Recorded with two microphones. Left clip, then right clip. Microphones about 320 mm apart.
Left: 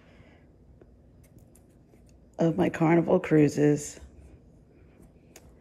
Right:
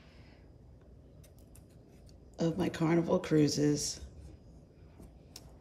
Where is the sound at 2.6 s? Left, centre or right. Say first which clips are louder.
Left 7 dB; centre.